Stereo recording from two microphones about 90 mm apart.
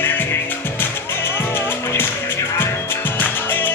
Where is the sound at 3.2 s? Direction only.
20° left (ahead or behind).